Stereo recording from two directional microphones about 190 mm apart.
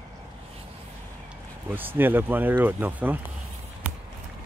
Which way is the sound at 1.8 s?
10° right (ahead or behind).